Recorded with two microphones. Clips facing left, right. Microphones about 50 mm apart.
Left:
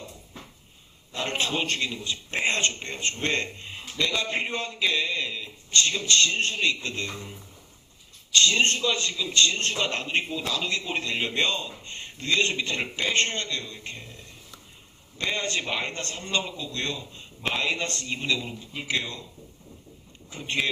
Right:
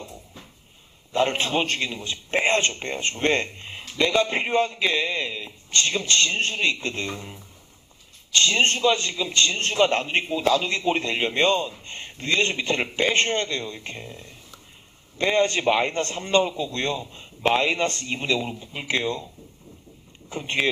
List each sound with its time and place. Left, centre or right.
1.1 s a man's voice: right
5.5 s a man's voice: right
8.3 s a man's voice: right
15.2 s a man's voice: right
20.6 s speech: right